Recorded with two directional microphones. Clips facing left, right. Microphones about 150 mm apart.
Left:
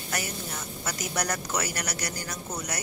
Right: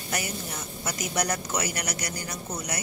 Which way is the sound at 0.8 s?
15° right (ahead or behind).